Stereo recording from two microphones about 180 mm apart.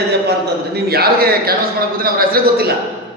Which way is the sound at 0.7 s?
60° right (ahead or behind).